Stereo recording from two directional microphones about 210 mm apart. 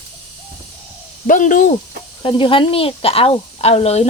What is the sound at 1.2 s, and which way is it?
Speech, 40° left (ahead or behind).